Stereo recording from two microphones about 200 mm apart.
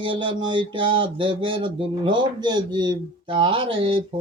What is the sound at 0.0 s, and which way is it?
Speech, 25° right (ahead or behind).